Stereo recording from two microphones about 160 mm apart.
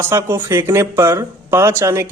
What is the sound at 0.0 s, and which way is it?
Speech, 15° right (ahead or behind).